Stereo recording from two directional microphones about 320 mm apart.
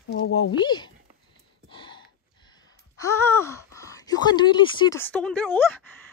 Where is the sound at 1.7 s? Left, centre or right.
Centre.